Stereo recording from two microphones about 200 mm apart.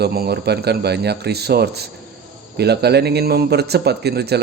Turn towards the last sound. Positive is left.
turn(degrees=-55)  # may be behind; listen again after turning